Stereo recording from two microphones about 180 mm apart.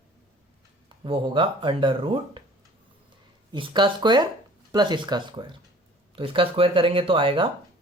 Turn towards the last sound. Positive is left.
turn(degrees=-30)  # may be behind; listen again after turning